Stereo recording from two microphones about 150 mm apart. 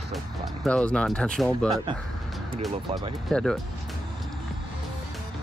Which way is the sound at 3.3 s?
Centre (ahead or behind).